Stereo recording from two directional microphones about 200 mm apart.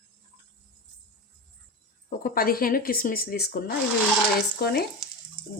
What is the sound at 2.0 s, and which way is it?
A woman's voice, 45° left (ahead or behind).